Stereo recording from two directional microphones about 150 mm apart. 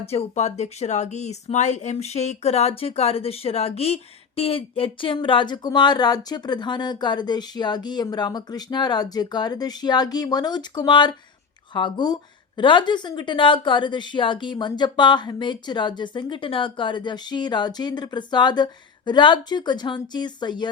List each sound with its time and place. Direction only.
0.0 s speech: 45° left (ahead or behind)